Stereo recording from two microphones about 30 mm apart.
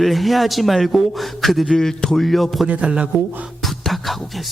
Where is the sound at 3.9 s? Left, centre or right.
Centre.